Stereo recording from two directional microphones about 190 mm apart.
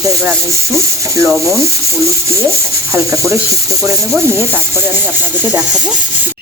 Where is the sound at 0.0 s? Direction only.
15° right (ahead or behind).